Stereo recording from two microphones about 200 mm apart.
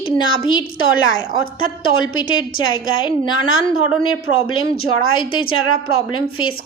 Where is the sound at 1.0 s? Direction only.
90° left.